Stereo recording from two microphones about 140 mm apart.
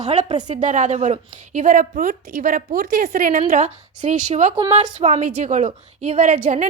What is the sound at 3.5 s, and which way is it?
A woman's voice, 60° right (ahead or behind).